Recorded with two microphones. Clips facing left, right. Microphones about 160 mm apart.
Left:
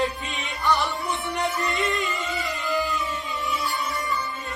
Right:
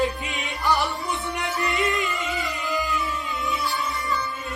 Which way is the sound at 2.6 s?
20° right (ahead or behind).